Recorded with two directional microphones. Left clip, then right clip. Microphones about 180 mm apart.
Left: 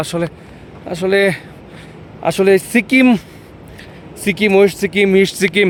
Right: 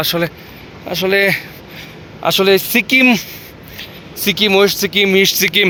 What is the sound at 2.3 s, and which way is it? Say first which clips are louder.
Speech: even; 30° left (ahead or behind).